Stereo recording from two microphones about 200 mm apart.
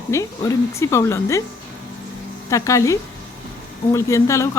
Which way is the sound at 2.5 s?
15° left (ahead or behind).